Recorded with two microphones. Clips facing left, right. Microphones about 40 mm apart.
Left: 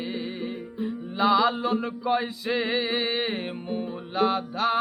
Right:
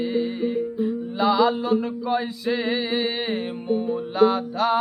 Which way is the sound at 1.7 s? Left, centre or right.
Left.